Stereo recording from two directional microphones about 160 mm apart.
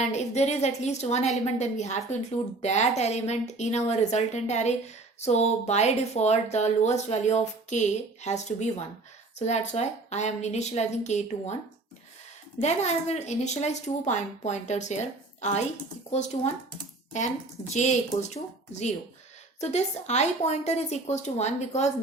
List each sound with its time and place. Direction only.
0.1 s speech: 45° left (ahead or behind)
12.5 s speech: 45° left (ahead or behind)